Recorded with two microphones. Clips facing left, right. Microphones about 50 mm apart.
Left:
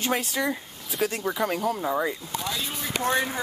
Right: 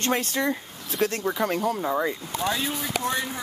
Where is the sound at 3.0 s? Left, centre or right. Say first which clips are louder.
Left 6 dB; left.